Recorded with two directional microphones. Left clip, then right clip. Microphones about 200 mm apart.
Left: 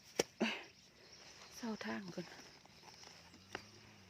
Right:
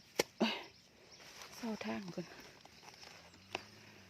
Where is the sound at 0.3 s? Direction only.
10° right (ahead or behind).